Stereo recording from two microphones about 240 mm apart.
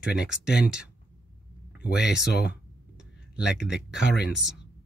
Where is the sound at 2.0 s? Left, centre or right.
Centre.